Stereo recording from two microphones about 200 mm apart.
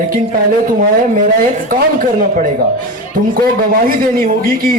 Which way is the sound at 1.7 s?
40° right (ahead or behind).